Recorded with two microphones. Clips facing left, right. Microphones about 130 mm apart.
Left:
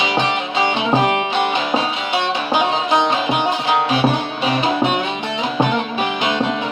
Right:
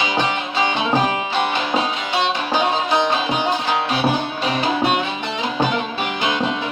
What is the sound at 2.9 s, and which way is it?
Music, 20° left (ahead or behind).